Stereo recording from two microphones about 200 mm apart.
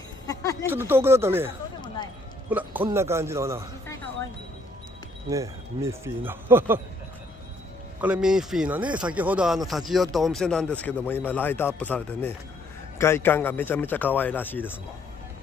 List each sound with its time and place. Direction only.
0.3 s a sound: 15° left (ahead or behind)
0.7 s speech: 10° right (ahead or behind)
2.5 s speech: 10° right (ahead or behind)
5.3 s speech: 15° right (ahead or behind)
8.0 s speech: 5° right (ahead or behind)